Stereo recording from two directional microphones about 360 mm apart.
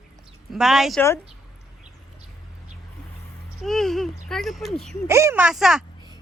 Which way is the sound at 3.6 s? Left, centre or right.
Centre.